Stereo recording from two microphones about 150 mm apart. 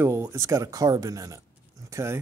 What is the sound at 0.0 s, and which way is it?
Speech, 20° right (ahead or behind).